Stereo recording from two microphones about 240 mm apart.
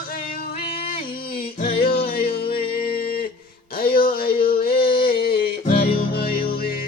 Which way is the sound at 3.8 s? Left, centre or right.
Left.